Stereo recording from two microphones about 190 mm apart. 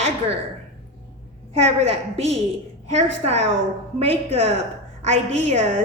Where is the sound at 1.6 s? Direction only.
35° right (ahead or behind).